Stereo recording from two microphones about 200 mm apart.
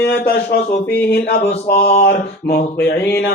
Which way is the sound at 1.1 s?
55° left (ahead or behind).